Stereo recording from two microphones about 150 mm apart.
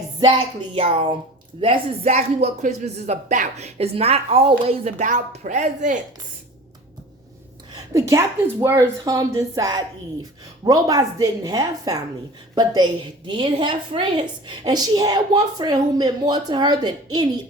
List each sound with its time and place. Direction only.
0.2 s a sound: 35° right (ahead or behind)
1.6 s speech: 45° right (ahead or behind)
7.9 s a woman's voice: 20° right (ahead or behind)